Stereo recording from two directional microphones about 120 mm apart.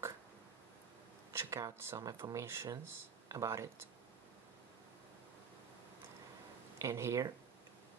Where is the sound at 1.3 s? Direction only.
20° right (ahead or behind).